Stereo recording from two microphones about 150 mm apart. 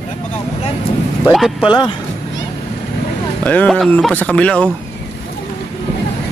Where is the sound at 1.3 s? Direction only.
Centre (ahead or behind).